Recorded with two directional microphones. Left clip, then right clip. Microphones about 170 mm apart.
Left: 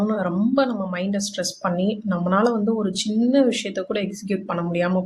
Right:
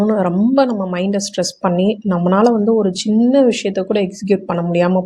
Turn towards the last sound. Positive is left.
turn(degrees=-30)  # may be behind; listen again after turning